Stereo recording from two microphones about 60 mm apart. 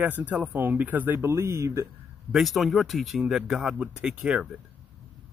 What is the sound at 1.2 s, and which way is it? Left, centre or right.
Speech, right.